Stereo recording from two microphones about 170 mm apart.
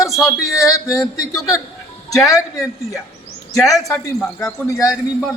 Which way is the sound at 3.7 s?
Centre (ahead or behind).